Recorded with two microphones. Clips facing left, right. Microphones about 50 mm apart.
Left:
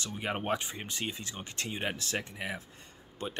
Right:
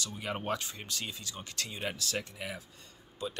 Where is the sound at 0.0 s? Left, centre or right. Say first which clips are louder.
Left 2 dB; left.